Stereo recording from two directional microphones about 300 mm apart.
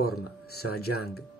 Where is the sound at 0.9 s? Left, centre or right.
Left.